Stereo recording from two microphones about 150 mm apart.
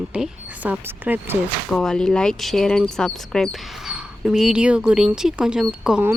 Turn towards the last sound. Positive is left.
turn(degrees=-10)  # may be behind; listen again after turning